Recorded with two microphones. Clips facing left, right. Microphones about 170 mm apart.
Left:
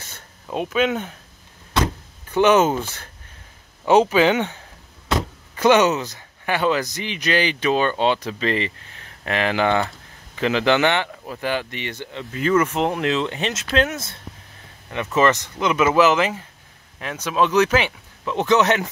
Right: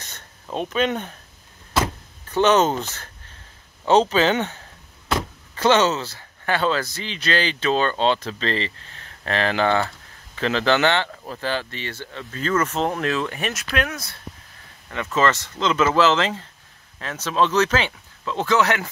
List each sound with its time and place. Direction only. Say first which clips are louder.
0.0 s a sound: left 1 dB; 10° left (ahead or behind)
2.2 s speech: left 2 dB; 10° left (ahead or behind)
5.6 s speech: left 2 dB; 15° left (ahead or behind)